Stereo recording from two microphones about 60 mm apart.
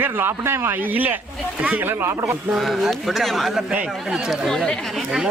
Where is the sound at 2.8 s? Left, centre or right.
Centre.